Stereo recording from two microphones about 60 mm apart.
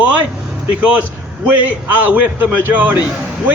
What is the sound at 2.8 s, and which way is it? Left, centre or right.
Speech, right.